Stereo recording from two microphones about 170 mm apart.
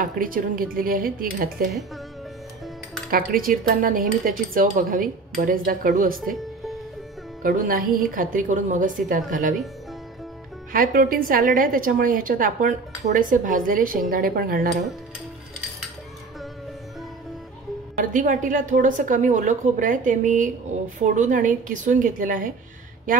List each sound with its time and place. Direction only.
0.0 s speech: 55° right (ahead or behind)
3.1 s speech: 55° right (ahead or behind)
7.4 s a woman's voice: 55° right (ahead or behind)
10.7 s a woman's voice: 55° right (ahead or behind)
17.9 s a woman's voice: 50° right (ahead or behind)